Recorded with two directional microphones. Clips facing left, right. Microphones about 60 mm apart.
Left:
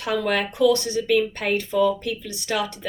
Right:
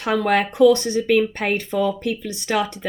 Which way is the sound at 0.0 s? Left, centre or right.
Right.